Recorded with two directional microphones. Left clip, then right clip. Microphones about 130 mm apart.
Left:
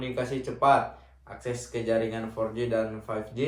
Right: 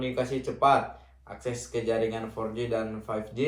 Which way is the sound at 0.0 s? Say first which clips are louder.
Right 1 dB; 5° left (ahead or behind).